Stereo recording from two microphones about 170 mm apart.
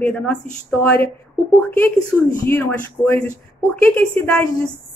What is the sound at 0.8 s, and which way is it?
Speech, 10° left (ahead or behind).